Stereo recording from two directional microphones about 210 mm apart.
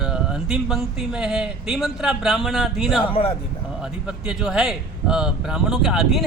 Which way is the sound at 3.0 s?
25° left (ahead or behind).